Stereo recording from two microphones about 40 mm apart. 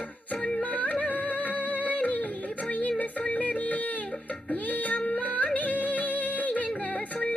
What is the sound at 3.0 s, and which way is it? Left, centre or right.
Music, left.